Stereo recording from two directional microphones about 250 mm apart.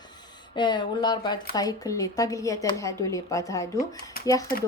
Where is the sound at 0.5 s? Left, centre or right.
Centre.